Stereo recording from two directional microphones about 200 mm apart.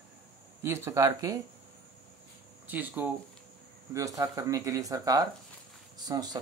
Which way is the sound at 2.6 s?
10° right (ahead or behind).